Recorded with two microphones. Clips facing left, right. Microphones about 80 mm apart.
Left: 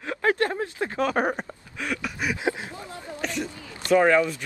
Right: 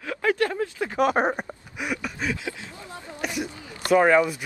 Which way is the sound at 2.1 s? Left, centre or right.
Centre.